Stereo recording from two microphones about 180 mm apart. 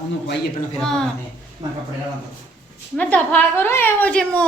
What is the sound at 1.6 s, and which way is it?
Speech, 20° right (ahead or behind).